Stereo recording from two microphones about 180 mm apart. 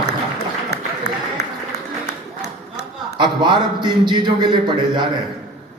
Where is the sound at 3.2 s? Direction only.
25° right (ahead or behind).